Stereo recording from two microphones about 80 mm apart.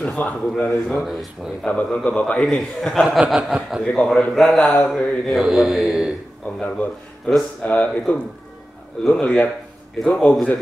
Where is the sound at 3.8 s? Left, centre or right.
Centre.